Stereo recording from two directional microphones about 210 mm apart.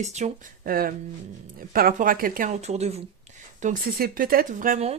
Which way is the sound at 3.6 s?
40° right (ahead or behind).